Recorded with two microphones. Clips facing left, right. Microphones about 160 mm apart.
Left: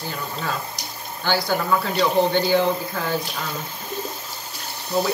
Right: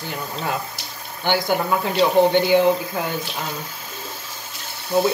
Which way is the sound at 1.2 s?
20° right (ahead or behind).